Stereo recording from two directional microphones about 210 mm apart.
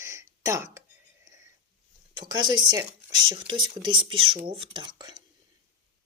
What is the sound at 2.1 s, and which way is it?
Speech, 20° right (ahead or behind).